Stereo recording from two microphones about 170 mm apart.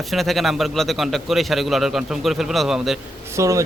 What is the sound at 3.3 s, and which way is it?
Speech, 20° right (ahead or behind).